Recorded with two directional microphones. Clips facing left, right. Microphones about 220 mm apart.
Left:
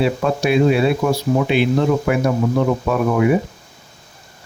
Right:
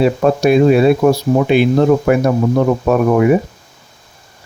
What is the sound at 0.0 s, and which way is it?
Speech, 45° right (ahead or behind).